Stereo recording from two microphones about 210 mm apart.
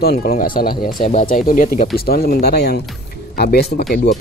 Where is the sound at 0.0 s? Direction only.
45° left (ahead or behind).